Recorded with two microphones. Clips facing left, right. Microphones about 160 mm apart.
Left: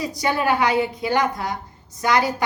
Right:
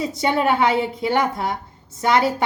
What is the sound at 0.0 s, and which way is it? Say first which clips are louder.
A woman's voice: right 2 dB; 25° right (ahead or behind).